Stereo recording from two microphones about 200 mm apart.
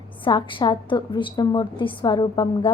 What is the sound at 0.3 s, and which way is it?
A woman's voice, 25° left (ahead or behind).